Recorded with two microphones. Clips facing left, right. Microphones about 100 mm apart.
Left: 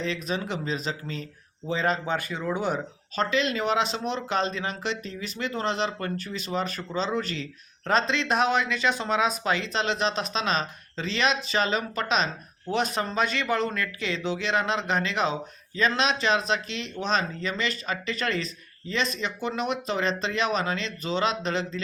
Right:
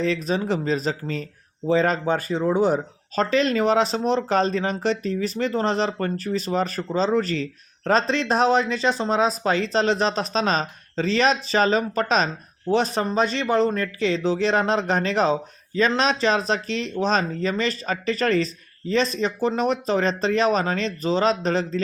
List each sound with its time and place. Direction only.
0.0 s speech: 35° right (ahead or behind)